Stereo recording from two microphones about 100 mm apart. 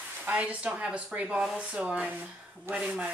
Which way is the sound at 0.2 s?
15° right (ahead or behind).